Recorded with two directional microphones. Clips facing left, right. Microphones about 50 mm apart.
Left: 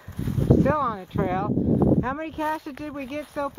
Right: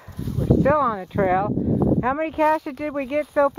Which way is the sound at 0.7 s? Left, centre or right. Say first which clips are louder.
Right 5 dB; right.